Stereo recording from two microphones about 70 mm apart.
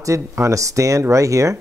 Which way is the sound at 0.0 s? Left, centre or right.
Right.